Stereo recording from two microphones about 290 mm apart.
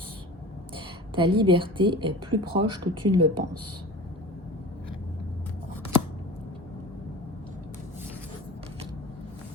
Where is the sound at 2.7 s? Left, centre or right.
Right.